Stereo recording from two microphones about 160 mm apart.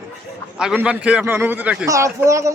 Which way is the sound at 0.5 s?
5° right (ahead or behind).